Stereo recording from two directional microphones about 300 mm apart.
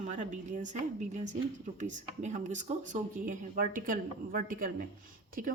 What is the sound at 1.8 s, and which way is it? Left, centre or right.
Speech, right.